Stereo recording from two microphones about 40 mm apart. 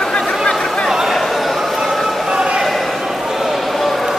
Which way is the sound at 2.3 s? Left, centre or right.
Right.